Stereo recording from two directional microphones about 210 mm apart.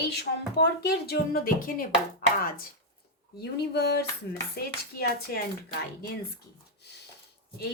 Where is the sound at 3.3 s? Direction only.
50° left (ahead or behind).